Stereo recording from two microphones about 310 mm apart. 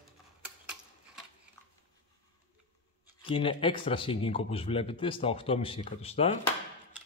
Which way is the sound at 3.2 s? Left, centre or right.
Centre.